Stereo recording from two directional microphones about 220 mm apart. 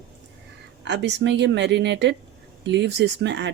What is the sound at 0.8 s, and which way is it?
Speech, 50° right (ahead or behind).